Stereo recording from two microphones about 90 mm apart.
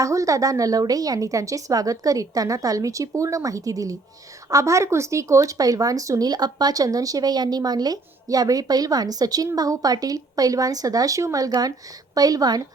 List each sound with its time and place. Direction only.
0.0 s a woman's voice: 35° right (ahead or behind)